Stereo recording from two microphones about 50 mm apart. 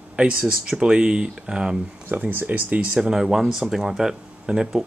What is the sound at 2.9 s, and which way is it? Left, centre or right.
Speech, centre.